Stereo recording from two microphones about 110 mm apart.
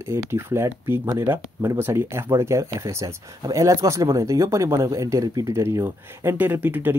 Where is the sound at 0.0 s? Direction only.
25° right (ahead or behind).